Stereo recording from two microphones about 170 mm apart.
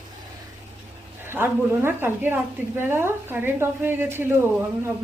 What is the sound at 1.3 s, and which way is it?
A woman's voice, 15° right (ahead or behind).